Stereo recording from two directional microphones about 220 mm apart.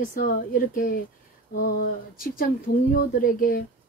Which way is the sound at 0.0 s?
40° left (ahead or behind).